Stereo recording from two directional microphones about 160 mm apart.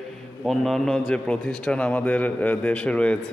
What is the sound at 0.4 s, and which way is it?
A man's voice, centre (ahead or behind).